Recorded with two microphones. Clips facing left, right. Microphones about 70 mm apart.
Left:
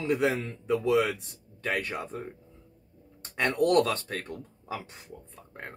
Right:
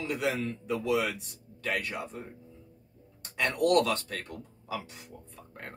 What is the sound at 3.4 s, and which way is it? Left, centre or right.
Speech, left.